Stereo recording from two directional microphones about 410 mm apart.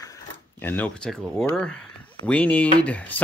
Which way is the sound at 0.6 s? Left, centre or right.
Centre.